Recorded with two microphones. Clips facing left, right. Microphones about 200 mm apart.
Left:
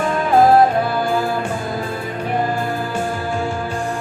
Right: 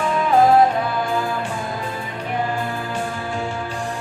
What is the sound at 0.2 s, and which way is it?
Music, 40° left (ahead or behind).